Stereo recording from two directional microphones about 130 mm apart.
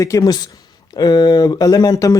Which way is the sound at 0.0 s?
25° left (ahead or behind).